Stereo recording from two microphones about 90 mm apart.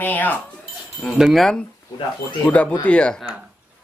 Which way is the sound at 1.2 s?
Centre (ahead or behind).